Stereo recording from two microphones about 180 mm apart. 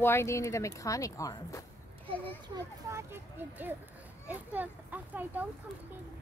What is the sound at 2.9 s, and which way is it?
A child's voice, 10° right (ahead or behind).